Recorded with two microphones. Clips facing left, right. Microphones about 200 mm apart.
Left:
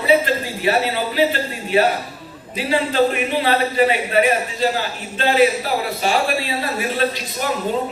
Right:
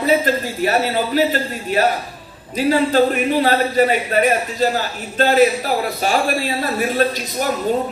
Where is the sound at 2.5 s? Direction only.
45° right (ahead or behind).